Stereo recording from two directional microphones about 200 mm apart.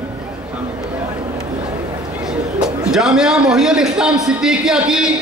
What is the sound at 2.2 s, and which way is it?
A man's voice, 5° right (ahead or behind).